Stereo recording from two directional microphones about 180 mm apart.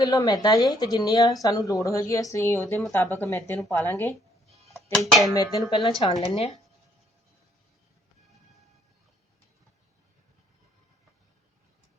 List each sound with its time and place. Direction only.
0.0 s speech: 20° left (ahead or behind)
4.4 s music: centre (ahead or behind)
5.2 s speech: 20° left (ahead or behind)